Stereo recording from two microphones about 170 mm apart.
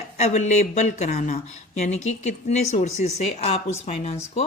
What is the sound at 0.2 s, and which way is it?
Speech, 45° left (ahead or behind).